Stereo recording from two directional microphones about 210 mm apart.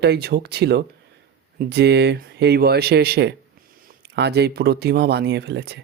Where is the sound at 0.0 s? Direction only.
50° right (ahead or behind).